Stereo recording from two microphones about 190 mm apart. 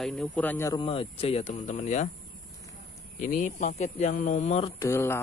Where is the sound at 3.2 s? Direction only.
40° left (ahead or behind).